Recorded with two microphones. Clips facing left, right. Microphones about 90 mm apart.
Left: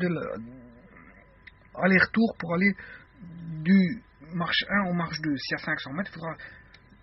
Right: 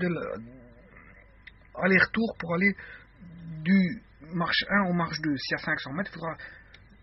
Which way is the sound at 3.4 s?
40° left (ahead or behind).